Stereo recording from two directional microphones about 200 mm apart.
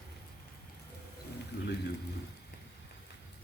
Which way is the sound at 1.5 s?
60° left (ahead or behind).